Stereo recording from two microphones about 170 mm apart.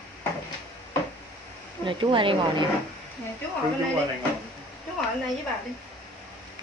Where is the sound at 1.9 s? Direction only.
30° right (ahead or behind).